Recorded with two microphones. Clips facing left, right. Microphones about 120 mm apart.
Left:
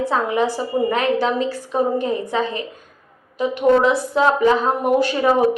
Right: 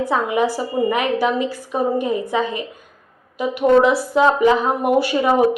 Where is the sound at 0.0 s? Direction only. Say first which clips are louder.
Right 1 dB; 10° right (ahead or behind).